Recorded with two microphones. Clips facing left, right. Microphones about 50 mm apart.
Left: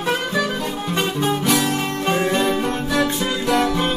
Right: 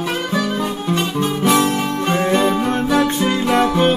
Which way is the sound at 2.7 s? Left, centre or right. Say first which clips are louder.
Right 4 dB; right.